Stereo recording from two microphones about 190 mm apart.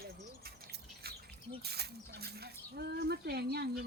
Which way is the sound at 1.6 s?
60° right (ahead or behind).